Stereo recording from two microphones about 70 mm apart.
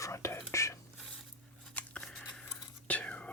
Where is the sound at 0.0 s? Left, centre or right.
Left.